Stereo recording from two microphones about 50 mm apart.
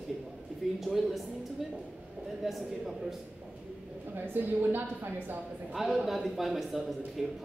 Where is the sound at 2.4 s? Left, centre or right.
Centre.